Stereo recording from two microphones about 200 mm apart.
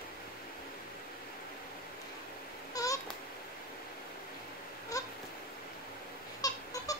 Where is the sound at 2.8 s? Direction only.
15° left (ahead or behind).